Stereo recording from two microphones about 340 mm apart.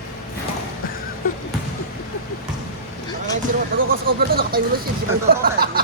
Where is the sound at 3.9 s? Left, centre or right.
Right.